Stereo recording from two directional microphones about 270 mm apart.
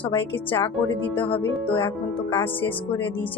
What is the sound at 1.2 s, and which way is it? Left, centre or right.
Speech, centre.